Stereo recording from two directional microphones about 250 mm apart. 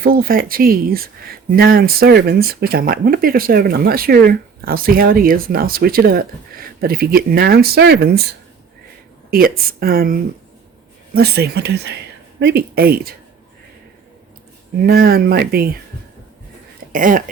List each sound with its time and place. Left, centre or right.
0.0 s speech: right
9.3 s speech: right
14.8 s speech: right
16.9 s speech: right